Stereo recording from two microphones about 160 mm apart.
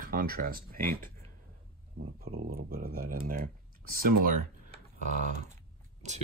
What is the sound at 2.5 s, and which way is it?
Speech, 65° right (ahead or behind).